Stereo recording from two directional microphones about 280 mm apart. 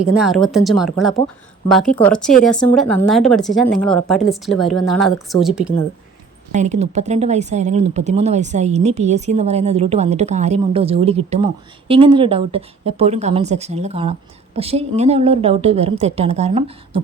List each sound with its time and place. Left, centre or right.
0.0 s speech: centre
6.5 s speech: right